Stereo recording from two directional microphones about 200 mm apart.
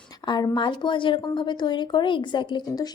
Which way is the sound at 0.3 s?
20° left (ahead or behind).